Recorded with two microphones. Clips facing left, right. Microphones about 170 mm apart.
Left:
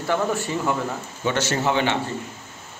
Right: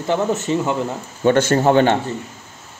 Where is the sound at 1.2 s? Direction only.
50° right (ahead or behind).